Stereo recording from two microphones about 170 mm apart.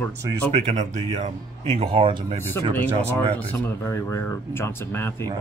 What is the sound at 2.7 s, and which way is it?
Speech, 10° left (ahead or behind).